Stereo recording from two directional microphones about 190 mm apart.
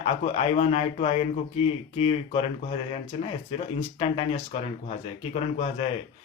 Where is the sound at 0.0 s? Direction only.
35° left (ahead or behind).